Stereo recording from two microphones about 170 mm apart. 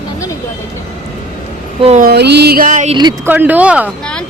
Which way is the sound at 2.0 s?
75° right (ahead or behind).